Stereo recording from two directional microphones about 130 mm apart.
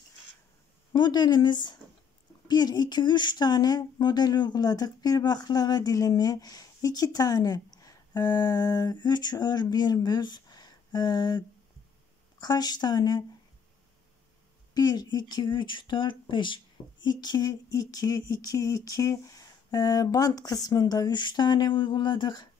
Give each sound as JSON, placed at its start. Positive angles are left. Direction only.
{"t": 0.9, "sound": "speech", "side_deg": 35}
{"t": 14.7, "sound": "speech", "side_deg": 30}